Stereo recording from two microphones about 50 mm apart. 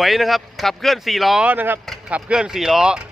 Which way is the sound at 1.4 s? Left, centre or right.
Right.